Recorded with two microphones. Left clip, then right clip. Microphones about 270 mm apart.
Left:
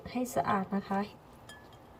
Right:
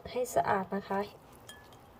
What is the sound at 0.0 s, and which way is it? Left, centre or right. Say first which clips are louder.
A woman's voice: right 2 dB; right.